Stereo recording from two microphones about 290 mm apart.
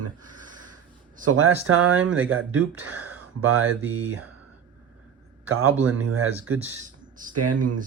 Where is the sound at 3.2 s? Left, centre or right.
Right.